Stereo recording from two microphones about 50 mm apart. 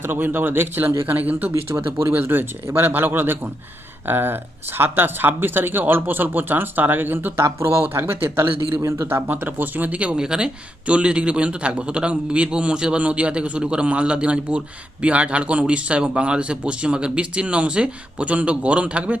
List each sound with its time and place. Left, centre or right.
0.0 s speech: right
2.0 s speech: right
7.4 s speech: right
8.8 s speech: right
9.0 s speech: right